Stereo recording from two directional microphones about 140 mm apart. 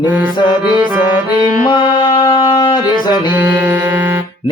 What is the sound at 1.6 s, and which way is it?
Music, 35° left (ahead or behind).